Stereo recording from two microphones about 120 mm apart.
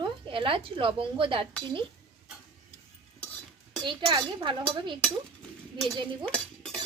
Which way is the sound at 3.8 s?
40° right (ahead or behind).